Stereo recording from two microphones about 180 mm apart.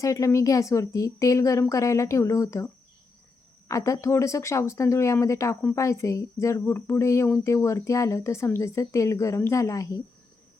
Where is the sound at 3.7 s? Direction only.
20° left (ahead or behind).